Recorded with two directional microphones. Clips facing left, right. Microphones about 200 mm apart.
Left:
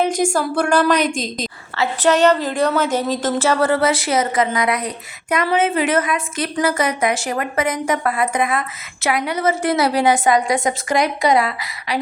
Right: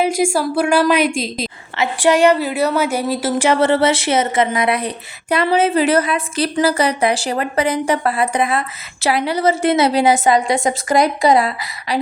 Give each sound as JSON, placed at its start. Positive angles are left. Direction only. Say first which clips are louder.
{"t": 0.0, "sound": "a sound", "louder": "right 2 dB", "side_deg": -5}
{"t": 0.3, "sound": "a woman's voice", "louder": "right 1 dB", "side_deg": -10}
{"t": 3.6, "sound": "a woman's voice", "louder": "right 2 dB", "side_deg": -25}